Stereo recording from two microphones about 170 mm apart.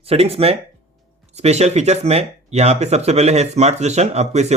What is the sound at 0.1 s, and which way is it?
Speech, 35° right (ahead or behind).